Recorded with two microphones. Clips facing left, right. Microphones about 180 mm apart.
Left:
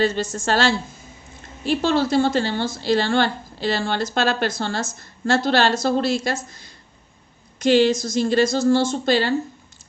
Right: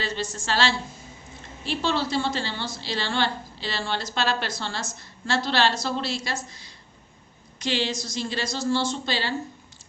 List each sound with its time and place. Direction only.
0.0 s a woman's voice: 45° left (ahead or behind)